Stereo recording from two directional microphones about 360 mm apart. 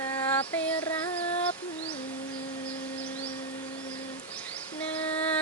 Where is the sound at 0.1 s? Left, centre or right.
Centre.